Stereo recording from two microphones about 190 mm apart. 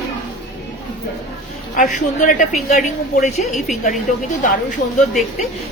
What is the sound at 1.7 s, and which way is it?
A woman's voice, 40° left (ahead or behind).